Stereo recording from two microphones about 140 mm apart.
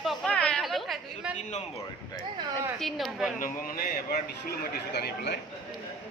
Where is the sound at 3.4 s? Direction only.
90° left.